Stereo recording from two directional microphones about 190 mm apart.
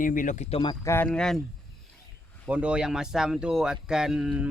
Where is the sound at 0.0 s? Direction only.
45° left (ahead or behind); by 0.8 s 30° left (ahead or behind).